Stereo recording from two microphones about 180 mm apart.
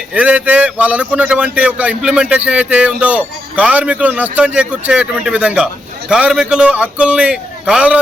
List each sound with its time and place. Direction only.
0.1 s a man's voice: 5° right (ahead or behind)